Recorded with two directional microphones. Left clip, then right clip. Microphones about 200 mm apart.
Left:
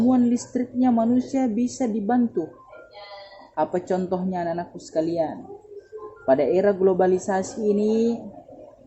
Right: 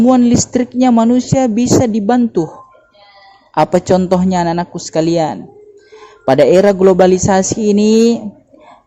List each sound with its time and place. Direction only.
0.1 s speech: 35° right (ahead or behind)
3.5 s speech: 35° right (ahead or behind)